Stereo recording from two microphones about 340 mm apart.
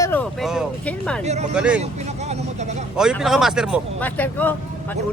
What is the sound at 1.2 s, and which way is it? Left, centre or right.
Speech, centre.